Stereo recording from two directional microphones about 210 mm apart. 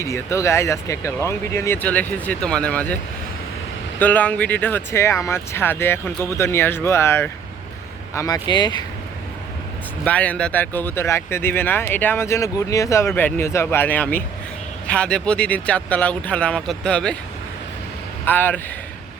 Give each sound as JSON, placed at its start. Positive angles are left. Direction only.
{"t": 0.0, "sound": "speech", "side_deg": 15}
{"t": 4.0, "sound": "speech", "side_deg": 5}
{"t": 10.0, "sound": "speech", "side_deg": 5}
{"t": 18.3, "sound": "speech", "side_deg": 10}